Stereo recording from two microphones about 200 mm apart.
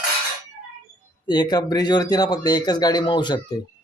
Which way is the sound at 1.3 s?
20° left (ahead or behind).